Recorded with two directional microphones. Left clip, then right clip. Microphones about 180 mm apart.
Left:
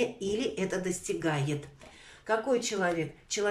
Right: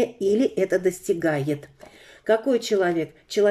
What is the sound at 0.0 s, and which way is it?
Speech, 40° right (ahead or behind).